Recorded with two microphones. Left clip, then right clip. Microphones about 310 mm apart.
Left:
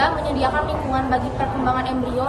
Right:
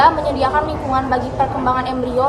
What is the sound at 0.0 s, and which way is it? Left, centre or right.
A woman's voice, centre.